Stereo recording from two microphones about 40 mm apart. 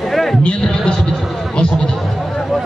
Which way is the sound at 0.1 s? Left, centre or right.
Centre.